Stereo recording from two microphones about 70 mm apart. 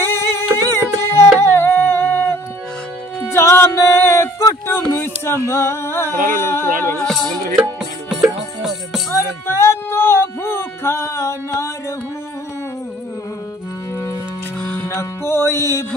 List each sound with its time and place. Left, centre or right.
0.0 s music: left
0.6 s singing: left
3.3 s music: left
5.0 s a sound: left
7.0 s music: centre
7.8 s music: centre
9.1 s speech: left
14.6 s music: centre
15.0 s a sound: left